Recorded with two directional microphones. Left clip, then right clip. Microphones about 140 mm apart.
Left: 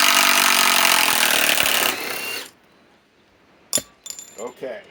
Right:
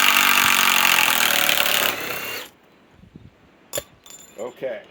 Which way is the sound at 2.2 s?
20° right (ahead or behind).